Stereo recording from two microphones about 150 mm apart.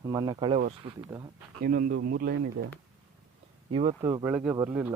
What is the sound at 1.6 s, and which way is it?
Speech, 80° right.